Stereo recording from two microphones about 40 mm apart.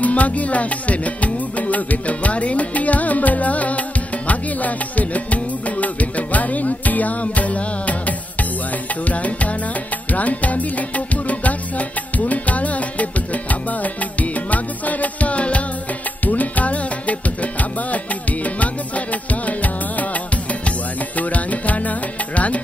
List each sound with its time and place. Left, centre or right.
0.0 s music: left
9.1 s music: left
12.2 s music: left
21.2 s music: left